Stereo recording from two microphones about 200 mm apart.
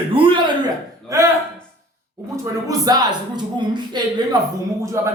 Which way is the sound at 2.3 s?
15° right (ahead or behind).